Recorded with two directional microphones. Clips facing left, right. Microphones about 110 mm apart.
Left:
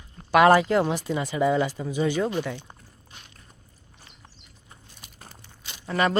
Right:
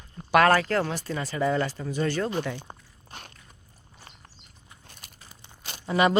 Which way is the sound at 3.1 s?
55° right (ahead or behind).